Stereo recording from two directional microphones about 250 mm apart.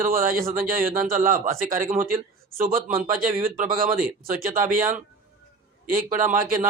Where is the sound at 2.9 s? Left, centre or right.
Right.